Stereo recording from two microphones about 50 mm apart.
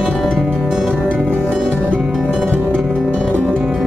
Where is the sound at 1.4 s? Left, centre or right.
Centre.